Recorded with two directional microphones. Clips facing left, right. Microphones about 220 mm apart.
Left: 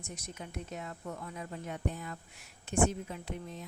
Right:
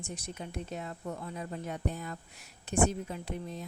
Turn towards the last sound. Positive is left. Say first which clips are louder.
# right 3 dB
turn(degrees=-35)  # may be behind; listen again after turning